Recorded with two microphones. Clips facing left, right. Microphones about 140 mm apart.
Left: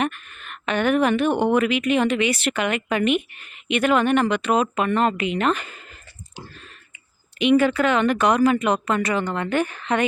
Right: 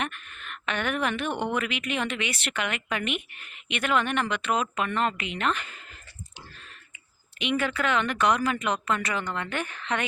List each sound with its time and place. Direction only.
0.0 s speech: 40° left (ahead or behind)
7.4 s speech: 35° left (ahead or behind)